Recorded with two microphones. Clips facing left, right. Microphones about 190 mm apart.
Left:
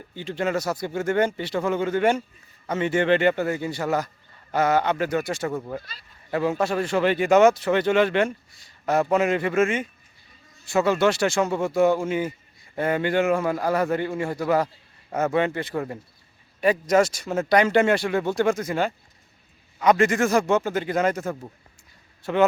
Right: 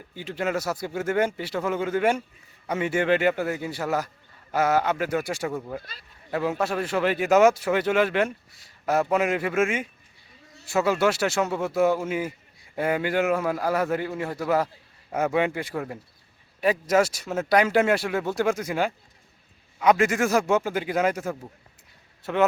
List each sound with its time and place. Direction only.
0.1 s speech: 5° right (ahead or behind)
5.8 s speech: 50° right (ahead or behind)
6.3 s speech: 5° right (ahead or behind)